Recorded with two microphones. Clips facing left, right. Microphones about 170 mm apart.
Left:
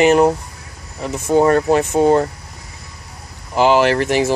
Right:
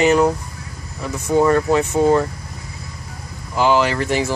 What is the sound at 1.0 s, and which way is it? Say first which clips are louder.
Speech: left 2 dB; 25° left (ahead or behind).